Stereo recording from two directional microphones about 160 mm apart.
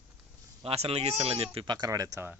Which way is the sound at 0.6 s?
40° right (ahead or behind).